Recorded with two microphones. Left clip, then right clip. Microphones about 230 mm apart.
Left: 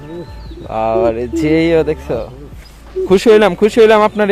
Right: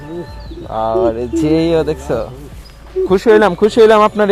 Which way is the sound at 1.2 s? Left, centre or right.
Centre.